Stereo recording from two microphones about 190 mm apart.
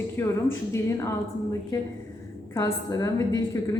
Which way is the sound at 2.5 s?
20° left (ahead or behind).